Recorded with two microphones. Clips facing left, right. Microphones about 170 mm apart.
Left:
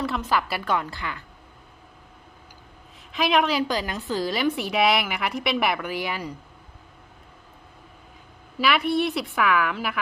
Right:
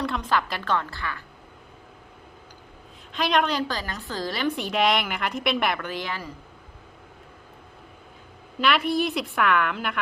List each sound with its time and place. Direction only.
0.0 s a woman's voice: 5° left (ahead or behind)
3.1 s a woman's voice: 5° left (ahead or behind)
8.5 s a woman's voice: 5° left (ahead or behind)